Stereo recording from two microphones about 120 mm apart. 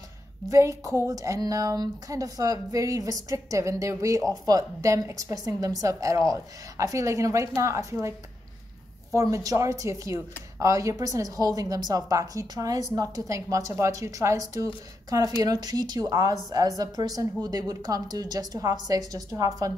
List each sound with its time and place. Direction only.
0.5 s a woman's voice: 25° right (ahead or behind)
9.1 s a woman's voice: 25° right (ahead or behind)